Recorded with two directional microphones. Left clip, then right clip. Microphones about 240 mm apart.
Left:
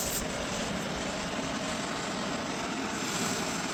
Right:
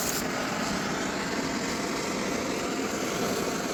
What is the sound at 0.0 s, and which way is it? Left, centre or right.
Vehicle, centre.